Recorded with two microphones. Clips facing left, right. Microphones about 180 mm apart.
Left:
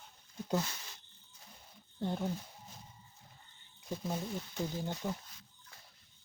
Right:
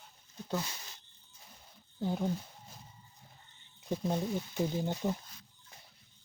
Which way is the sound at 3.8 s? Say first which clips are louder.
Right 5 dB; 20° right (ahead or behind).